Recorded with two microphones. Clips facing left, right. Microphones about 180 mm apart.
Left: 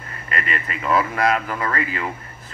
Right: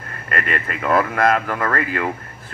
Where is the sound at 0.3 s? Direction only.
50° right (ahead or behind).